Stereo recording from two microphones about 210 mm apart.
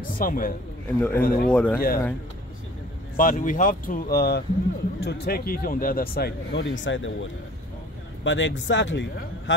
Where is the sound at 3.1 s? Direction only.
40° left (ahead or behind).